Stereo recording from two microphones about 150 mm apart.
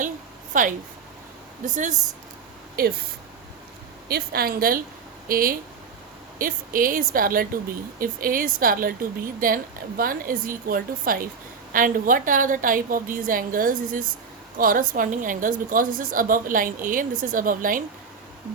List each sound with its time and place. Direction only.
0.5 s a woman's voice: 60° right (ahead or behind)
2.8 s speech: 75° right (ahead or behind)
4.1 s a woman's voice: 90° right; by 17.8 s 65° right (ahead or behind)